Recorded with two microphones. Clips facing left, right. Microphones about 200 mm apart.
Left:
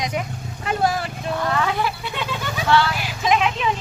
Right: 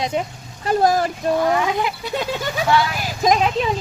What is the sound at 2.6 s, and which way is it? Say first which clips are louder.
Speech: even; 15° right (ahead or behind).